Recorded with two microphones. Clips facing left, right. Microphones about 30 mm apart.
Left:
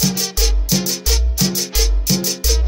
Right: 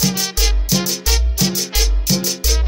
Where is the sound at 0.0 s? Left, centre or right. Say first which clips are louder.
Even; centre.